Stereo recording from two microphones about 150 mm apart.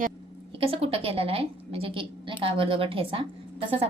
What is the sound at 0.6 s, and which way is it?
A woman's voice, 40° right (ahead or behind).